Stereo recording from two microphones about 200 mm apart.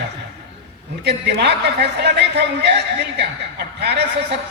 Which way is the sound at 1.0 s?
55° right (ahead or behind).